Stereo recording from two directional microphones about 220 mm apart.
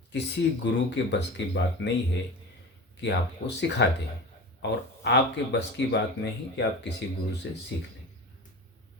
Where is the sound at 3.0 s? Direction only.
50° left (ahead or behind).